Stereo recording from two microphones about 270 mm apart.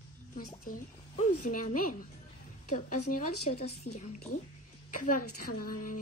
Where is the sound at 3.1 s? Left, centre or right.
Left.